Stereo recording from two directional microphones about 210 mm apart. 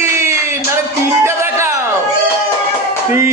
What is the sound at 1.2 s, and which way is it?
Music, 10° right (ahead or behind).